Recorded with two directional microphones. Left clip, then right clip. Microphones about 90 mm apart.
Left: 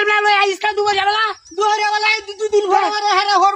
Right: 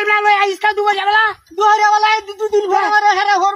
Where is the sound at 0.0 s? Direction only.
20° left (ahead or behind).